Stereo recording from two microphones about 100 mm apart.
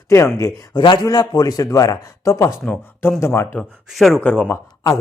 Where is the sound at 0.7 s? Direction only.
50° left (ahead or behind).